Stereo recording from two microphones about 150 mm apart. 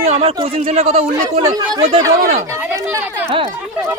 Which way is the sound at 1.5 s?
25° right (ahead or behind).